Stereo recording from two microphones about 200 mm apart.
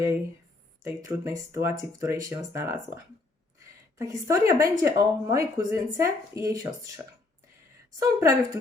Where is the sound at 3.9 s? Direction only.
15° right (ahead or behind).